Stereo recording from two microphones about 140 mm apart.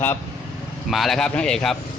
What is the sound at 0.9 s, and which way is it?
Speech, centre (ahead or behind).